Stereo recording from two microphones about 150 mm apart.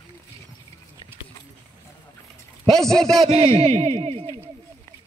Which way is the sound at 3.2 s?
40° right (ahead or behind).